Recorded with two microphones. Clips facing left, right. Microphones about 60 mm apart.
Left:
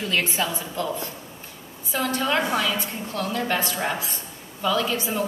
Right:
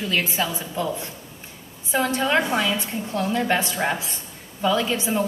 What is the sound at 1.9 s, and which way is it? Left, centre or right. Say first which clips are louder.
A woman's voice: right 3 dB; right.